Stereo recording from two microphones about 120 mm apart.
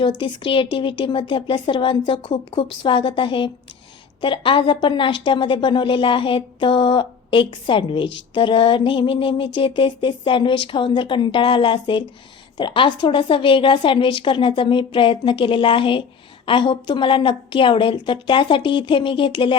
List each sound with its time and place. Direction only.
0.0 s a woman's voice: 45° left (ahead or behind)